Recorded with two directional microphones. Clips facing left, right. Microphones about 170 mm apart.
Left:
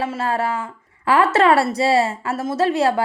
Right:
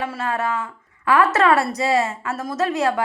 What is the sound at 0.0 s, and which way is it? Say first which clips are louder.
A woman's voice: left 2 dB; 30° left (ahead or behind).